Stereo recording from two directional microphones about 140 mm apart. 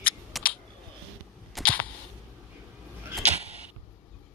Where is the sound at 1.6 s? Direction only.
Centre (ahead or behind).